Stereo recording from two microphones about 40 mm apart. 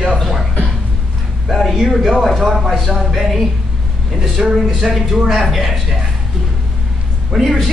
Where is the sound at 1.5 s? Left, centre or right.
Centre.